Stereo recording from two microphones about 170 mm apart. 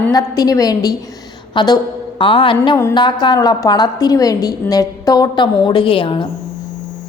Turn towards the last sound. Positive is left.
turn(degrees=30)  # may be behind; listen again after turning